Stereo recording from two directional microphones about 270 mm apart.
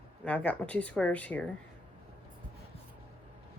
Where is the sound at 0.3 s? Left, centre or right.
Centre.